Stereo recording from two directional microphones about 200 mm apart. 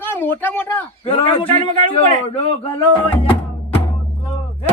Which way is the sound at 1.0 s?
25° left (ahead or behind).